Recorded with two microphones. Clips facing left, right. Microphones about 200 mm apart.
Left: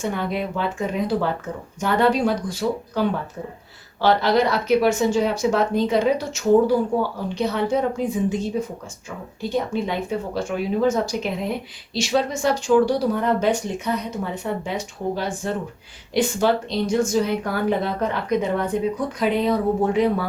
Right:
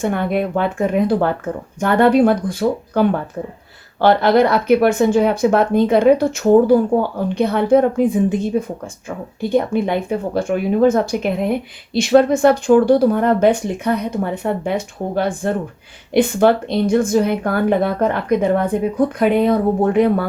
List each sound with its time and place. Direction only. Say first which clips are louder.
0.0 s a woman's voice: right 6 dB; 55° right (ahead or behind)